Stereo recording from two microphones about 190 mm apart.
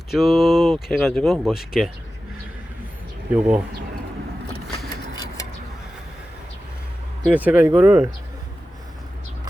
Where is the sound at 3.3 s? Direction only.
10° right (ahead or behind).